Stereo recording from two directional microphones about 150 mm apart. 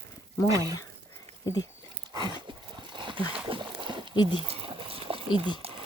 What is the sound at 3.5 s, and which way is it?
Boat, 35° right (ahead or behind).